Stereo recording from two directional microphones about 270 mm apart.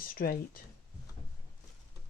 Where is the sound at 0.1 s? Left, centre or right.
Left.